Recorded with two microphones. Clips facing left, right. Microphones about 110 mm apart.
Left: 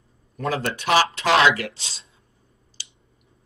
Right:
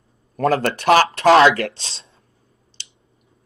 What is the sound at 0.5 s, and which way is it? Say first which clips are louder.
Speech: right 6 dB; 50° right (ahead or behind).